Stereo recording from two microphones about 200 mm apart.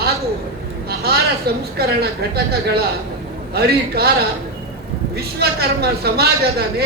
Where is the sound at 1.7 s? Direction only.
50° right (ahead or behind).